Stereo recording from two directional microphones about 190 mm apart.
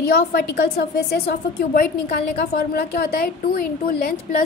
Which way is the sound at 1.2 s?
55° left (ahead or behind).